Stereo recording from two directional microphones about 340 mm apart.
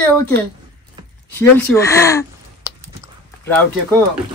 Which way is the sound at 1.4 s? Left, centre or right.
Centre.